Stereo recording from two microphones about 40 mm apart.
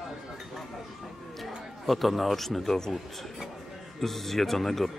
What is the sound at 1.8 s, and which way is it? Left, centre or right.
Speech, centre.